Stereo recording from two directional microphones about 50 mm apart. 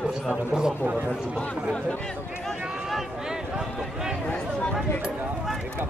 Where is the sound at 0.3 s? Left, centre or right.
Centre.